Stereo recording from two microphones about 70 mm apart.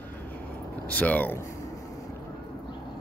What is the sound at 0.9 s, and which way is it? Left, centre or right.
Speech, left.